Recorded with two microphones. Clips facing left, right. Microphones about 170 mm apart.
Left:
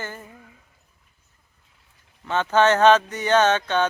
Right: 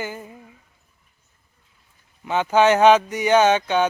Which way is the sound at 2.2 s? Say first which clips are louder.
Right 2 dB; 10° right (ahead or behind).